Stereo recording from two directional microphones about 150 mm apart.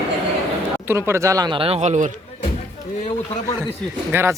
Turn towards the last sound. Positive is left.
turn(degrees=-15)  # may be behind; listen again after turning